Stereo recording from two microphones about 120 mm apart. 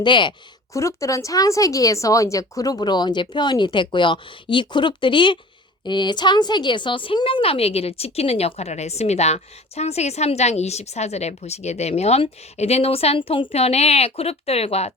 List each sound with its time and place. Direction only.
0.0 s speech: 40° left (ahead or behind)
0.7 s a woman's voice: 25° left (ahead or behind); by 14.9 s 60° left (ahead or behind)